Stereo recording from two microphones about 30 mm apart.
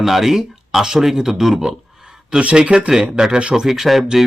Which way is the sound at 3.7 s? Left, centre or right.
Centre.